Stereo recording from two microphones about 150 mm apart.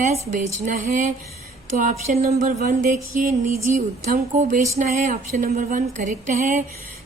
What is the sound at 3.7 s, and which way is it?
Speech, 50° right (ahead or behind).